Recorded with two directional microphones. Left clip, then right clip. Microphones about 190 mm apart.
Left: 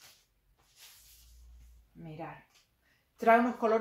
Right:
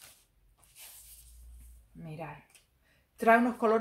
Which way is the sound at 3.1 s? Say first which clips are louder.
Right 1 dB; 55° right (ahead or behind).